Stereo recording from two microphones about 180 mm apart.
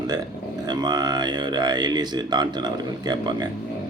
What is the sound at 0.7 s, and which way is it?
Speech, 25° right (ahead or behind).